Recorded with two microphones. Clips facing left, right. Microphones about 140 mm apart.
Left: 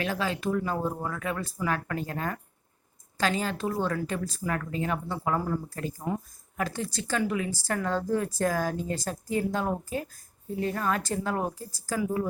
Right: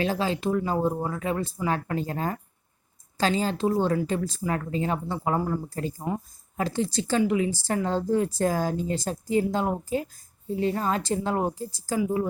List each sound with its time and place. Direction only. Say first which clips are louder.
0.0 s speech: right 4 dB; 30° right (ahead or behind)